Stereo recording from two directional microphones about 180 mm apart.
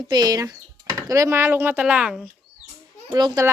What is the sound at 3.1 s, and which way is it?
Speech, 20° right (ahead or behind).